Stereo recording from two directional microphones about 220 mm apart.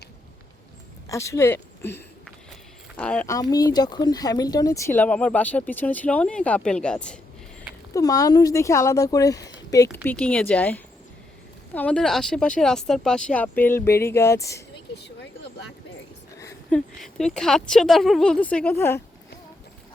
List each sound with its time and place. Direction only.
1.1 s speech: 15° left (ahead or behind)
7.9 s speech: 15° left (ahead or behind)
15.0 s a sound: 50° left (ahead or behind)
16.4 s speech: 10° left (ahead or behind)